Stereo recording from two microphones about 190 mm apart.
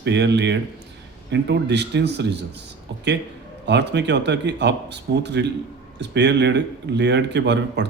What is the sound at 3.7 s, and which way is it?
A man's voice, 65° right (ahead or behind).